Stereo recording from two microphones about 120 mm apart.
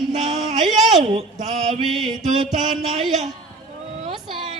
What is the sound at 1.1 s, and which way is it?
Speech, 60° right (ahead or behind).